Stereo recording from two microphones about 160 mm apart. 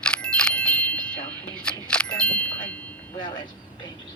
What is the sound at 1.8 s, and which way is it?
Speech, 5° left (ahead or behind).